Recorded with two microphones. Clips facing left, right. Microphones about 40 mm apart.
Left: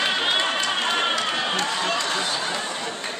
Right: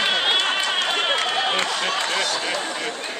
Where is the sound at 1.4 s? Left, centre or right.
Right.